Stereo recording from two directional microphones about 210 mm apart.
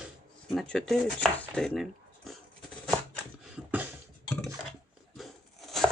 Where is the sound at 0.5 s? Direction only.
Centre (ahead or behind).